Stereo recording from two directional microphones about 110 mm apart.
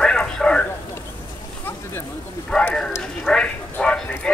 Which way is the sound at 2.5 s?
10° left (ahead or behind).